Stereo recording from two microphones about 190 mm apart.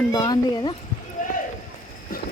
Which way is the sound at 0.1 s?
20° left (ahead or behind).